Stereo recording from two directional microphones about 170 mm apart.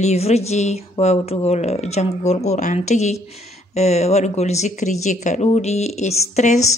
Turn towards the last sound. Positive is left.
turn(degrees=40)  # may be behind; listen again after turning